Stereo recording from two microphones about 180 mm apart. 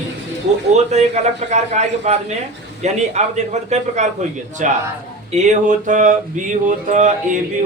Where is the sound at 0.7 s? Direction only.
40° right (ahead or behind).